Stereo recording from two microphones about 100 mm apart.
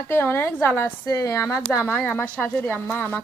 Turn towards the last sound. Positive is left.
turn(degrees=25)  # may be behind; listen again after turning